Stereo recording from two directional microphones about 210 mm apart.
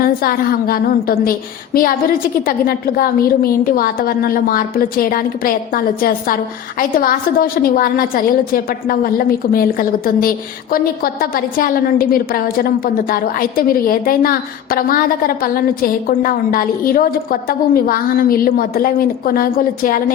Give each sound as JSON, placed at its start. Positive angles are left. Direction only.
{"t": 0.0, "sound": "a woman's voice", "side_deg": 45}